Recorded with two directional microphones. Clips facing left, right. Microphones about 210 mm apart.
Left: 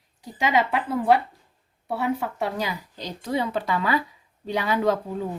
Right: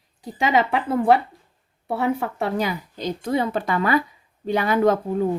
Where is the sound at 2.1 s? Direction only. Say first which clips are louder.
Right 3 dB; 55° right (ahead or behind).